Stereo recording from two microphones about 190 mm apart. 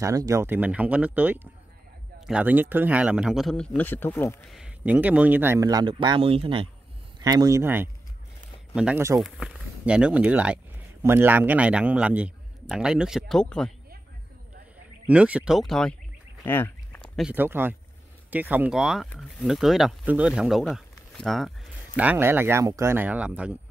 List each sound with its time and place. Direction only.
0.0 s a man's voice: 15° right (ahead or behind); by 4.5 s 10° left (ahead or behind)
4.5 s speech: 5° right (ahead or behind)
9.2 s speech: centre (ahead or behind)
15.0 s a man's voice: 5° right (ahead or behind)
16.4 s a sound: 10° left (ahead or behind)
17.3 s a man's voice: 10° right (ahead or behind)